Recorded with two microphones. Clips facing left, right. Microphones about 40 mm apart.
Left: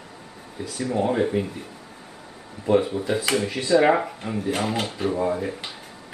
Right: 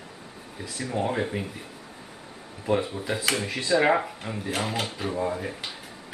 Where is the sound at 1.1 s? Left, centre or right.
Centre.